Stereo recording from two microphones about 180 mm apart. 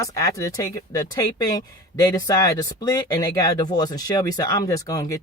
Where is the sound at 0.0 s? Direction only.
20° left (ahead or behind).